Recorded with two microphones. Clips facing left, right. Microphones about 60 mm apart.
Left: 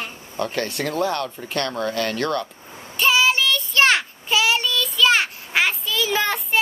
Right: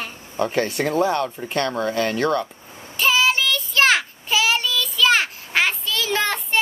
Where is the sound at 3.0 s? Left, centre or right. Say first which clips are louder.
Left 1 dB; centre.